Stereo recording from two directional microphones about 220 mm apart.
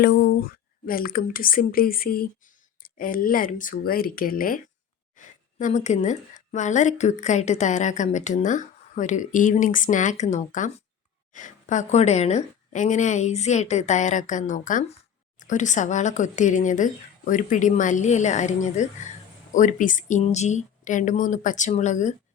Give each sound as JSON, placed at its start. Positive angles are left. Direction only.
{"t": 0.0, "sound": "a woman's voice", "side_deg": 45}